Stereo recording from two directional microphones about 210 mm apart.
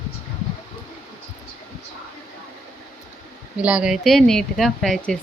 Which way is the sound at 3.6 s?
5° right (ahead or behind).